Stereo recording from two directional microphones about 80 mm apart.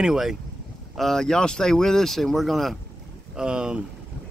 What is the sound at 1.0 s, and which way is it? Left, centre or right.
Speech, centre.